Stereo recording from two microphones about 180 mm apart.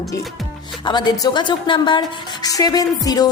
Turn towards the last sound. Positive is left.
turn(degrees=20)  # may be behind; listen again after turning